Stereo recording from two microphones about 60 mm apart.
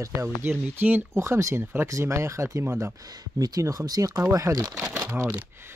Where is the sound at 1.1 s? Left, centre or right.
Right.